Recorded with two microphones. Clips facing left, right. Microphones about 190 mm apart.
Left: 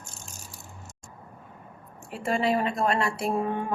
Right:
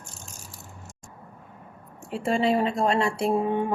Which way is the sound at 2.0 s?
30° right (ahead or behind).